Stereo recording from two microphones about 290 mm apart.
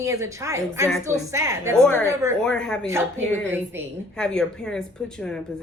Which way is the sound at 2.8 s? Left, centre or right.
Centre.